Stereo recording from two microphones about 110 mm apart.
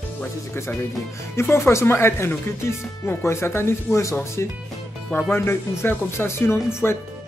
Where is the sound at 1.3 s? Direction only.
20° left (ahead or behind).